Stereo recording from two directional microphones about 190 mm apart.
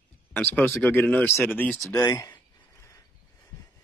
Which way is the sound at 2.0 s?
20° left (ahead or behind).